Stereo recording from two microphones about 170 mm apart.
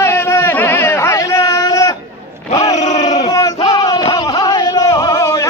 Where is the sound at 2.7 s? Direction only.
45° left (ahead or behind).